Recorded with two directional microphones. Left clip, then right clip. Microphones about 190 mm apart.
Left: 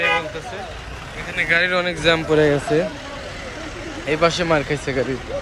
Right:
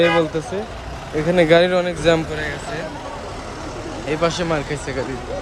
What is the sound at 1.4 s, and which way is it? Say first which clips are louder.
Speech: right 2 dB; 20° right (ahead or behind).